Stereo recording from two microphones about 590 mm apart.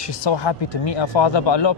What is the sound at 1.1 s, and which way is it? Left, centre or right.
Speech, left.